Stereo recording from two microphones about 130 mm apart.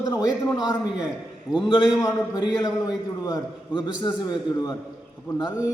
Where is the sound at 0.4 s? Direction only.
25° left (ahead or behind).